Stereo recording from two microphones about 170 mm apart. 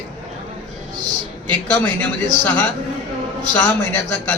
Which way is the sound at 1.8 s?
10° left (ahead or behind).